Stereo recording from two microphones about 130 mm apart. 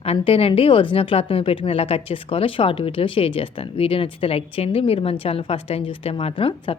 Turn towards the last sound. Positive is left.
turn(degrees=45)  # may be behind; listen again after turning